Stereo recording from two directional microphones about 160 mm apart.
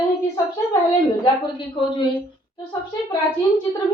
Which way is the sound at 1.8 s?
30° left (ahead or behind).